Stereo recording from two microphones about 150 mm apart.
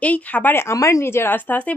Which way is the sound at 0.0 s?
10° left (ahead or behind).